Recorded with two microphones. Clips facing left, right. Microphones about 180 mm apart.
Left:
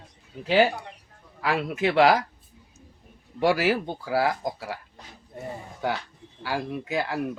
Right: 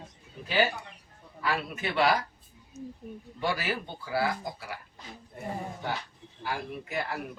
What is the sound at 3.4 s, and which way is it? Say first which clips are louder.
Speech: left 9 dB; 90° left.